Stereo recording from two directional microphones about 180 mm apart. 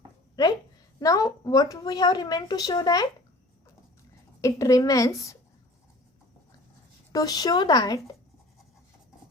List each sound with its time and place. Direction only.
0.9 s a woman's voice: 20° left (ahead or behind)
4.4 s a woman's voice: 20° left (ahead or behind)
7.1 s a woman's voice: 20° left (ahead or behind)